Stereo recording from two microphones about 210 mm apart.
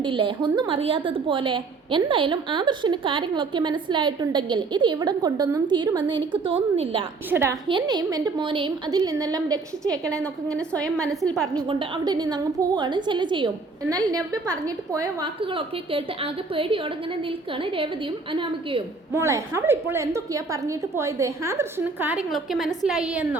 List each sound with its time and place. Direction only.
0.0 s a woman's voice: 25° right (ahead or behind)
7.3 s a woman's voice: 10° right (ahead or behind)
9.8 s a woman's voice: 5° left (ahead or behind)
11.5 s a woman's voice: 20° right (ahead or behind)
19.1 s a woman's voice: 15° right (ahead or behind)